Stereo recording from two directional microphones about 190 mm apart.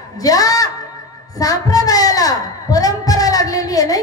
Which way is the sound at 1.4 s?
20° left (ahead or behind).